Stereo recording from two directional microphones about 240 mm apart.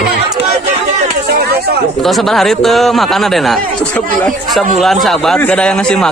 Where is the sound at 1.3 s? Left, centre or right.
Right.